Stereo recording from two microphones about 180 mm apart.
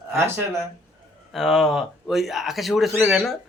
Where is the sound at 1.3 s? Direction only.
Centre (ahead or behind).